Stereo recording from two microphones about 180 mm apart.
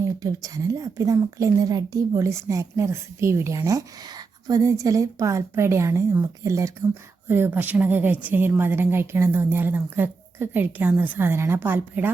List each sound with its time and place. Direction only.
0.0 s speech: 20° right (ahead or behind)